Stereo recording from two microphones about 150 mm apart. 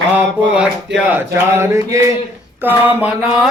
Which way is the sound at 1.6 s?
20° right (ahead or behind).